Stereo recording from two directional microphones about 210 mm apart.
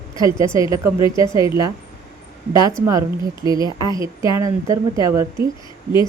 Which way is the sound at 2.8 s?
15° right (ahead or behind).